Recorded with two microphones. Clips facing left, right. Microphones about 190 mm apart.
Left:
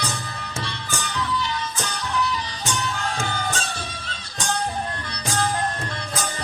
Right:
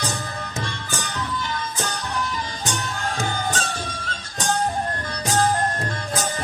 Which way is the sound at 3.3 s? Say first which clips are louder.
Right 2 dB; 45° right (ahead or behind).